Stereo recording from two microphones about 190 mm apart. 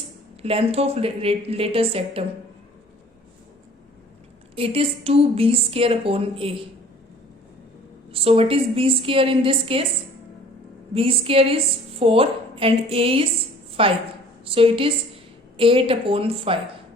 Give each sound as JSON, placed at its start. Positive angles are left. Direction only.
{"t": 0.4, "sound": "a woman's voice", "side_deg": -30}
{"t": 4.5, "sound": "a woman's voice", "side_deg": -30}
{"t": 8.1, "sound": "a woman's voice", "side_deg": -30}
{"t": 10.9, "sound": "a woman's voice", "side_deg": -30}